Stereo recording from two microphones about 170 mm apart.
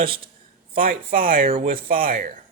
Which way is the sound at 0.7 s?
60° right (ahead or behind).